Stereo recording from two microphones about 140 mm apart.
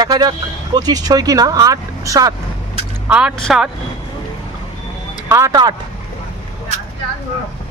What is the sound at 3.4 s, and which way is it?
Speech, centre (ahead or behind).